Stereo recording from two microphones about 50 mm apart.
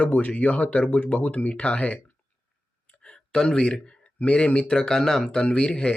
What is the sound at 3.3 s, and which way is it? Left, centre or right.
Speech, centre.